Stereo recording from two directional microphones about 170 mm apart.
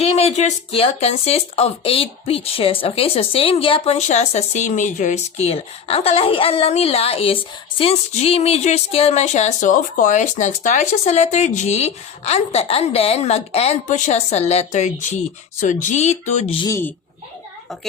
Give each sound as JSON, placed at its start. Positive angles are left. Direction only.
{"t": 0.0, "sound": "speech", "side_deg": 35}
{"t": 16.6, "sound": "speech", "side_deg": 15}